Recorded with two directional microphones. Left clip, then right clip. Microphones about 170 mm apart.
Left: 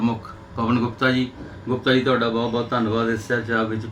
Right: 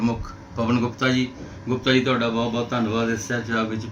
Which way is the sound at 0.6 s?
25° right (ahead or behind).